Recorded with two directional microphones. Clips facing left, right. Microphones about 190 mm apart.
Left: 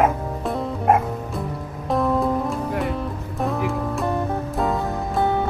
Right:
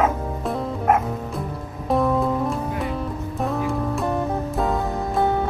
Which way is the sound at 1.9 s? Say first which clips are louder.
Even; centre (ahead or behind).